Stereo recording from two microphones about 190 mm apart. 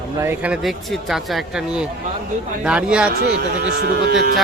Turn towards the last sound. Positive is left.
turn(degrees=-55)  # may be behind; listen again after turning